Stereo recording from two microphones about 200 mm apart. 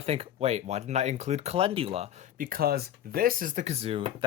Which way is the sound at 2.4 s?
45° right (ahead or behind).